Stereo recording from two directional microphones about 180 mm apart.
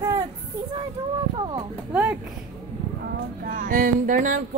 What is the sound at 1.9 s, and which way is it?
Speech, 10° right (ahead or behind).